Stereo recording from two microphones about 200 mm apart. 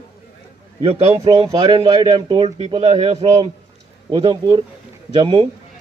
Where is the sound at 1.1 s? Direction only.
20° right (ahead or behind).